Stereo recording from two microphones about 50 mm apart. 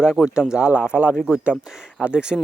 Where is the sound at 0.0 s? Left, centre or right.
Centre.